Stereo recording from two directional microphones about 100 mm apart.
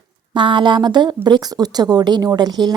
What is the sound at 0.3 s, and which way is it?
Speech, 50° right (ahead or behind).